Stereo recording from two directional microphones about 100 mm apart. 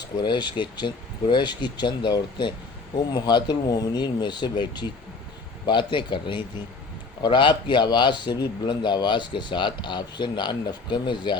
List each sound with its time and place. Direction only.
0.0 s speech: 50° left (ahead or behind)